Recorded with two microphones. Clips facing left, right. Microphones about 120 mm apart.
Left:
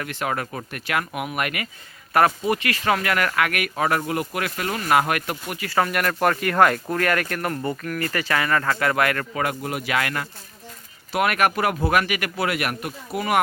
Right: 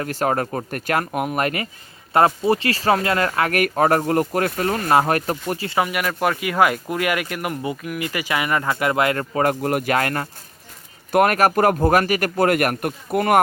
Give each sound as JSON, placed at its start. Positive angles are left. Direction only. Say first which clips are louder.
{"t": 0.0, "sound": "speech", "louder": "right 5 dB", "side_deg": -40}
{"t": 5.7, "sound": "speech", "louder": "left 2 dB", "side_deg": -10}
{"t": 9.4, "sound": "a man's voice", "louder": "right 10 dB", "side_deg": -45}